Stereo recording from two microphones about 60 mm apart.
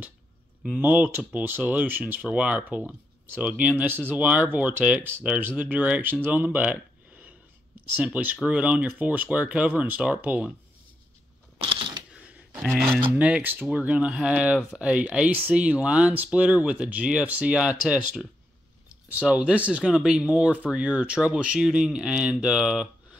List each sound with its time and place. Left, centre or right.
0.7 s speech: right
2.2 s speech: right
6.3 s a sound: right
7.9 s speech: right
12.1 s a sound: right
13.1 s speech: right
19.8 s speech: centre